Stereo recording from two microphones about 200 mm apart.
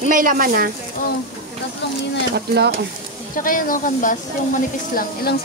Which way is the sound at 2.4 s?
55° right (ahead or behind).